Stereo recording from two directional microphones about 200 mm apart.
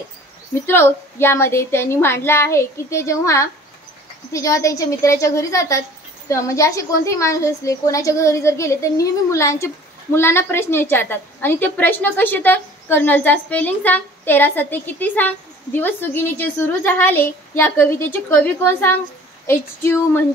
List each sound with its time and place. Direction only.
0.7 s a woman's voice: 10° left (ahead or behind)